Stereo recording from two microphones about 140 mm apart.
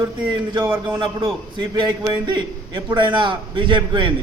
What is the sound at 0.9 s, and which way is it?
A man's voice, 35° right (ahead or behind).